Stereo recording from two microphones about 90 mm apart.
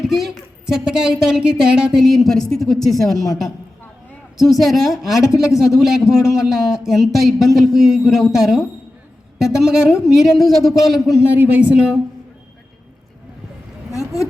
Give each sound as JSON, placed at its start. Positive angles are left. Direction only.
{"t": 0.0, "sound": "a woman's voice", "side_deg": 0}
{"t": 4.4, "sound": "a woman's voice", "side_deg": 0}
{"t": 11.3, "sound": "speech", "side_deg": -15}
{"t": 13.9, "sound": "speech", "side_deg": 35}